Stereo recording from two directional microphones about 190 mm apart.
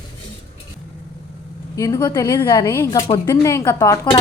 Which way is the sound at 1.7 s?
20° left (ahead or behind).